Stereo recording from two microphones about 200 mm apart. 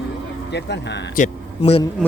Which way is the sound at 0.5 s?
60° left (ahead or behind).